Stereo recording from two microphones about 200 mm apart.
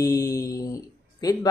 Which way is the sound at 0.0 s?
15° left (ahead or behind).